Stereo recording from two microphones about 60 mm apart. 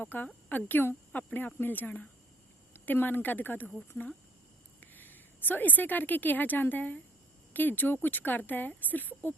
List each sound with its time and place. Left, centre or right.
0.0 s speech: left
4.8 s a woman's voice: left